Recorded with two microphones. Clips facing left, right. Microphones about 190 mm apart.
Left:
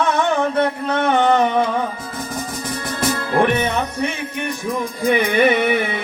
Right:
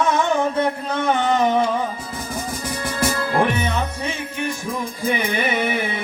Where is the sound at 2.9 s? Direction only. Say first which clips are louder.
Left 2 dB; 60° left (ahead or behind).